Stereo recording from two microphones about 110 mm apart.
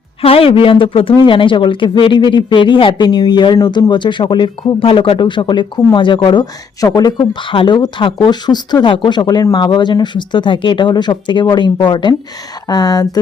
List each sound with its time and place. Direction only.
0.2 s a man's voice: 60° left (ahead or behind)
6.4 s speech: 30° left (ahead or behind)